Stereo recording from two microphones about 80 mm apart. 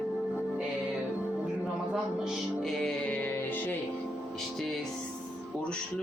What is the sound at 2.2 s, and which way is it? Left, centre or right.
Music, centre.